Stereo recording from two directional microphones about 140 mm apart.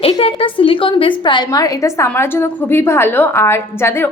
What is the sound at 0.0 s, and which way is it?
A woman's voice, 45° left (ahead or behind).